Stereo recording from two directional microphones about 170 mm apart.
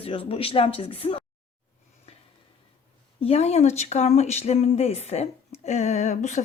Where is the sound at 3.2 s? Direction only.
40° left (ahead or behind).